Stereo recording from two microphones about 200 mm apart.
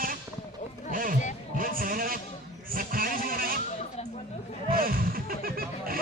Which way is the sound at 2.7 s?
45° right (ahead or behind).